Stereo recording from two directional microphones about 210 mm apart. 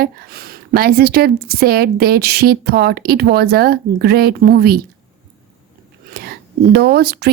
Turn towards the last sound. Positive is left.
turn(degrees=-50)  # may be behind; listen again after turning